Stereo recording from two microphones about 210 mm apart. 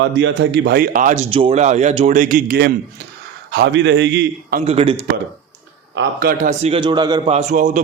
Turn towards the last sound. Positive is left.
turn(degrees=-35)  # may be behind; listen again after turning